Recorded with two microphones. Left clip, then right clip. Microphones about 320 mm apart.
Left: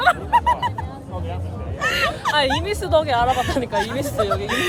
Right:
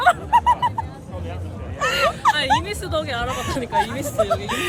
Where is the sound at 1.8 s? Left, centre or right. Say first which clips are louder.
Right 3 dB; centre.